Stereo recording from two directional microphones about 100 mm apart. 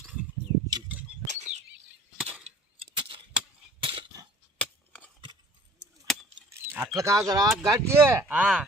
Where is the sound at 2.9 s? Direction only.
60° right (ahead or behind).